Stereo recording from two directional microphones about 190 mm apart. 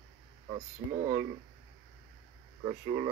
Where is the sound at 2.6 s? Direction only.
25° right (ahead or behind).